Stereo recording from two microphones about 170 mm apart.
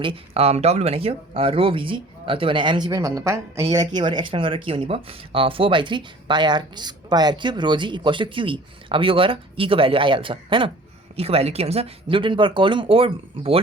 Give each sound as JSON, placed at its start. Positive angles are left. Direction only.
{"t": 0.0, "sound": "speech", "side_deg": -35}